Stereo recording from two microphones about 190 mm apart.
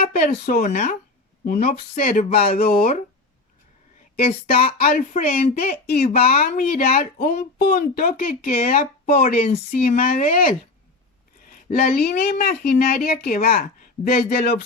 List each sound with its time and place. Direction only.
0.0 s speech: 40° left (ahead or behind)
0.3 s speech: 55° left (ahead or behind)
4.3 s speech: 50° left (ahead or behind)